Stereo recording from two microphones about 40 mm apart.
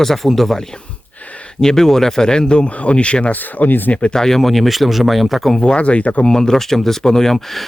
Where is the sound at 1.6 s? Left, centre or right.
Centre; by 3.3 s left.